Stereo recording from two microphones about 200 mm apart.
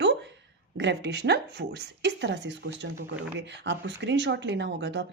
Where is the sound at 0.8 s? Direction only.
60° right (ahead or behind).